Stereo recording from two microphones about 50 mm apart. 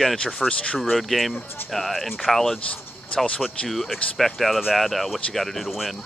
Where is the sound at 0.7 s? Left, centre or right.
Centre.